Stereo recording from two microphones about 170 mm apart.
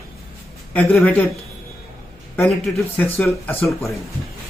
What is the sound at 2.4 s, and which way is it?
Speech, centre (ahead or behind).